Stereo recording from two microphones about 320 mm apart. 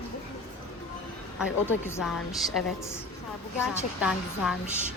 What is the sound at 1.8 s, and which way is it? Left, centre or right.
Speech, centre.